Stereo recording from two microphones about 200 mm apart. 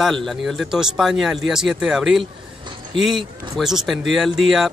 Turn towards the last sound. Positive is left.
turn(degrees=0)  # may be behind; listen again after turning